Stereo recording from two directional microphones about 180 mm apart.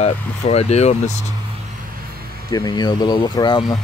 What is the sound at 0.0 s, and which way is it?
Speech, 35° left (ahead or behind).